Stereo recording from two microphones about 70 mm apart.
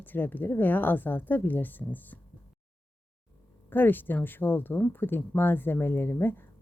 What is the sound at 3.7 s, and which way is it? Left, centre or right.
Speech, left.